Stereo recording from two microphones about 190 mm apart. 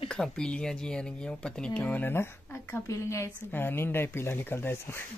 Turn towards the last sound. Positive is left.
turn(degrees=10)  # may be behind; listen again after turning